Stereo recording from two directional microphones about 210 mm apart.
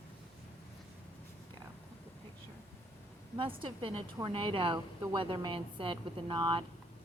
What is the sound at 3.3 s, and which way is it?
A woman's voice, 25° right (ahead or behind).